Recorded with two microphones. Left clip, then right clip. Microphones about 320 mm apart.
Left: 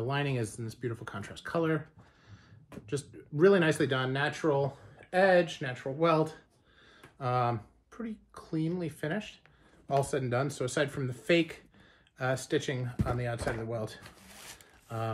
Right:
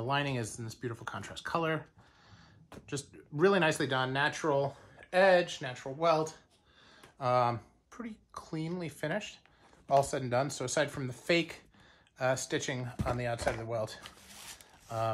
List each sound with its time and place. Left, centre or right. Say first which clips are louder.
0.1 s speech: right 1 dB; centre